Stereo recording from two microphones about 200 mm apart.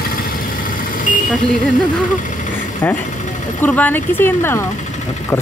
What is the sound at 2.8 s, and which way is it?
Speech, 10° left (ahead or behind).